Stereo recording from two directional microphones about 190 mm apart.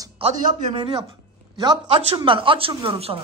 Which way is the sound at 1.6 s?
20° right (ahead or behind).